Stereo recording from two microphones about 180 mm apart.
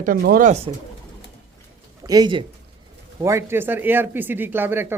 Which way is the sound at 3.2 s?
15° right (ahead or behind).